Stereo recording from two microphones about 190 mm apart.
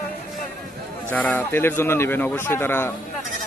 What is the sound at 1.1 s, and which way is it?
Speech, 10° left (ahead or behind).